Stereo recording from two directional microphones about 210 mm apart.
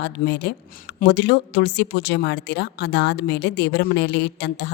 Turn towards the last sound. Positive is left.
turn(degrees=55)  # may be behind; listen again after turning